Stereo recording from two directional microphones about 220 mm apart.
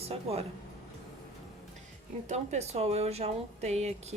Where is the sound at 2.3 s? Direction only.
30° right (ahead or behind).